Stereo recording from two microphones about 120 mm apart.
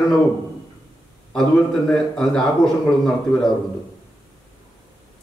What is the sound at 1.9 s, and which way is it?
Speech, 5° left (ahead or behind).